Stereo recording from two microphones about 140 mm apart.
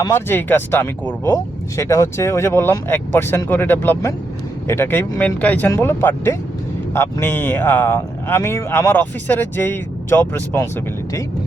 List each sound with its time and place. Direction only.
0.1 s speech: 15° left (ahead or behind)